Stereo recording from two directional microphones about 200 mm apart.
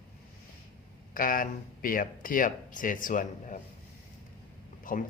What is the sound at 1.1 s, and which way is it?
A man's voice, 45° left (ahead or behind).